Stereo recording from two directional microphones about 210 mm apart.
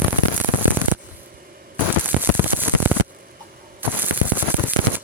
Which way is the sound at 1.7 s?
10° right (ahead or behind).